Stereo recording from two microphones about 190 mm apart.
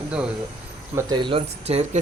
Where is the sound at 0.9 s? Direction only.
25° right (ahead or behind).